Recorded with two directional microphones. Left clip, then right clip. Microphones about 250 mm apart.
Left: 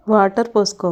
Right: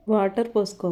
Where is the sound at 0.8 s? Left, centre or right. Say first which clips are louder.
Left 7 dB; centre.